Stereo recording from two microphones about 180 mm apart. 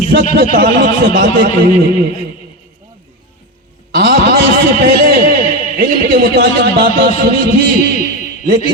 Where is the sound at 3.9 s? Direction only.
60° right (ahead or behind).